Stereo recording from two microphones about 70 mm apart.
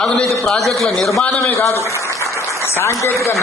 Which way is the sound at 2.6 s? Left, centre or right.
Left.